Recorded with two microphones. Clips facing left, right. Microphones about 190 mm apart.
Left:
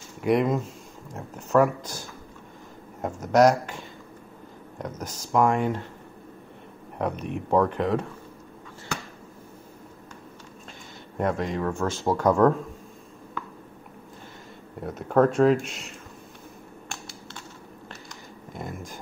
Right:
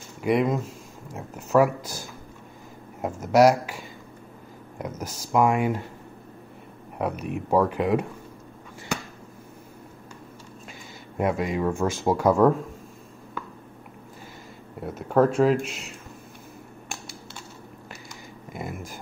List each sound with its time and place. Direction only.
0.2 s speech: centre (ahead or behind)
7.0 s speech: 5° right (ahead or behind)
11.1 s speech: 10° right (ahead or behind)
14.8 s speech: centre (ahead or behind)
18.5 s a sound: 5° right (ahead or behind)